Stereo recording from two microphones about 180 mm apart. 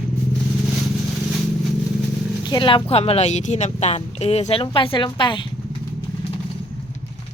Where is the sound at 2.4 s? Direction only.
25° left (ahead or behind).